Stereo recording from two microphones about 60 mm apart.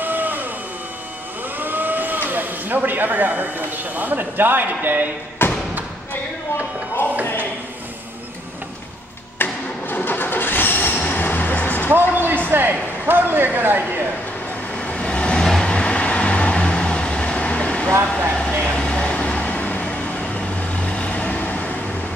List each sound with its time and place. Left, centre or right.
0.0 s a sound: right
1.6 s speech: right
5.4 s thump: left
9.4 s vehicle: left
11.9 s speech: right
14.8 s vehicle: centre